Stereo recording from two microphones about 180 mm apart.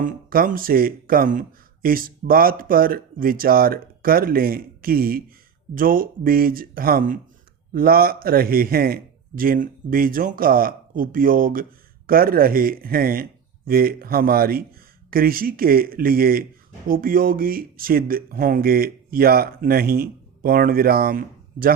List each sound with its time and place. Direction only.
0.0 s speech: 50° right (ahead or behind)